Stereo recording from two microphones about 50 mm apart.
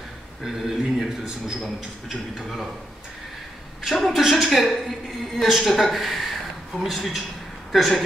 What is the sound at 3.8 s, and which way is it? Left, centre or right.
Speech, centre.